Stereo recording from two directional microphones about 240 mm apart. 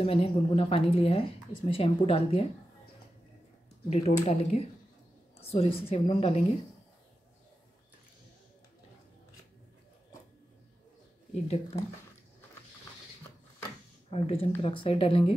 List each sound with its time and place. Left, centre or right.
0.0 s a woman's voice: left
3.9 s a woman's voice: left
11.4 s a woman's voice: left
14.1 s a woman's voice: left